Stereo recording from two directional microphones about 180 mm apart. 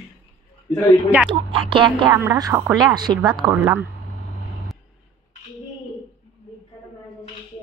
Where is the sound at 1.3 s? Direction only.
30° right (ahead or behind).